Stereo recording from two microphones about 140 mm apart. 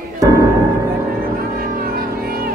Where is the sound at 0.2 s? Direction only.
25° right (ahead or behind).